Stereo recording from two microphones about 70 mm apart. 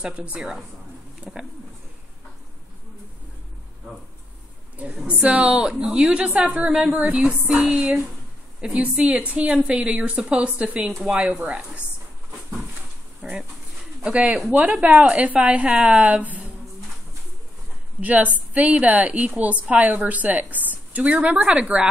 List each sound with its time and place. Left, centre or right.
0.0 s a woman's voice: centre
0.4 s a woman's voice: centre
1.2 s speech: right
4.7 s a woman's voice: centre
13.2 s a woman's voice: centre
18.0 s a woman's voice: right